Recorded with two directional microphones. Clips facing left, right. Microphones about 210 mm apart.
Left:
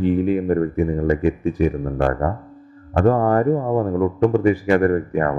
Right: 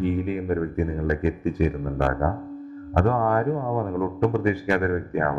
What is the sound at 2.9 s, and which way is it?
Speech, 35° left (ahead or behind).